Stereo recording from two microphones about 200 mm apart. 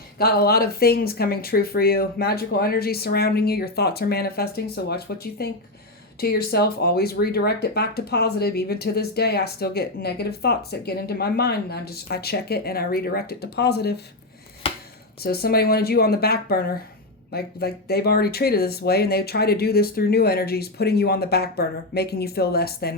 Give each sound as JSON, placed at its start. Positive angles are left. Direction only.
{"t": 0.2, "sound": "speech", "side_deg": 50}
{"t": 14.6, "sound": "chopping", "side_deg": 25}
{"t": 15.2, "sound": "speech", "side_deg": 50}